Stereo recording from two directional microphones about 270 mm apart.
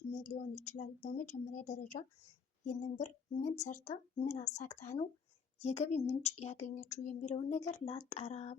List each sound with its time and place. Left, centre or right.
0.1 s speech: left